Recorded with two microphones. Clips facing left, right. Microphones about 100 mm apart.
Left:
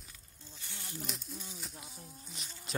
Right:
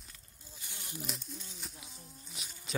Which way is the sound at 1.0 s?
Centre (ahead or behind).